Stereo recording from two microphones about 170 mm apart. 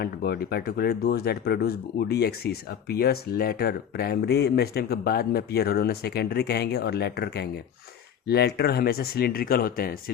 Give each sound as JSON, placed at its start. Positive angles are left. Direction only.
{"t": 0.0, "sound": "speech", "side_deg": 65}